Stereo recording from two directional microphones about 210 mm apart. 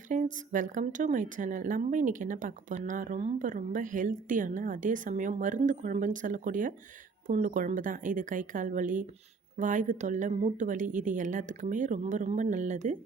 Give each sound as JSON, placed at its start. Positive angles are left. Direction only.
{"t": 0.1, "sound": "a woman's voice", "side_deg": -35}